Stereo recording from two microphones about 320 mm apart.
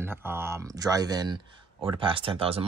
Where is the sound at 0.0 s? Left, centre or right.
Centre.